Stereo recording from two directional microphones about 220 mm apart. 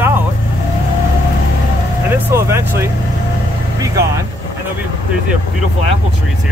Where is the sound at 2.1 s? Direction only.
10° right (ahead or behind).